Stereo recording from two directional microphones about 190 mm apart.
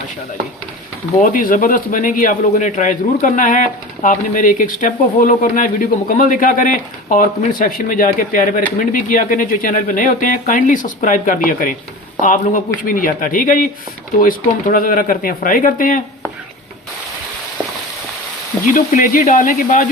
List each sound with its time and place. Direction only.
1.2 s a man's voice: 45° left (ahead or behind)
18.7 s a man's voice: 45° left (ahead or behind)